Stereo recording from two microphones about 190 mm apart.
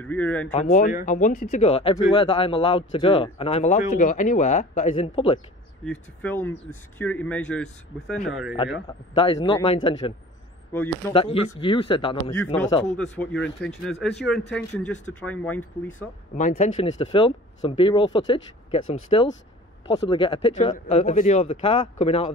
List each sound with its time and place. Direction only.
0.0 s speech: 10° left (ahead or behind)
0.5 s speech: 40° left (ahead or behind)
1.6 s speech: 30° left (ahead or behind)
5.9 s speech: 10° left (ahead or behind)
9.1 s speech: 25° left (ahead or behind)
10.7 s speech: 10° left (ahead or behind)
11.1 s speech: 30° left (ahead or behind)
12.9 s speech: 5° left (ahead or behind)
16.3 s speech: 40° left (ahead or behind)
16.8 s speech: 25° left (ahead or behind)